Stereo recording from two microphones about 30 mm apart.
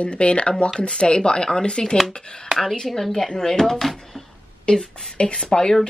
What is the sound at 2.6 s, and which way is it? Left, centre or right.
Speech, centre.